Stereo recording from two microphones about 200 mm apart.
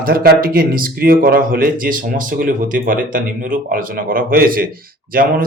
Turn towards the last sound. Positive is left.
turn(degrees=-45)  # may be behind; listen again after turning